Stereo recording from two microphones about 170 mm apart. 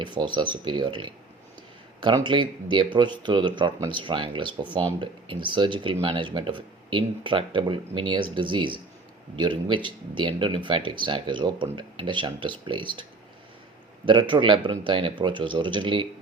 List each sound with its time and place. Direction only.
0.0 s speech: 25° right (ahead or behind)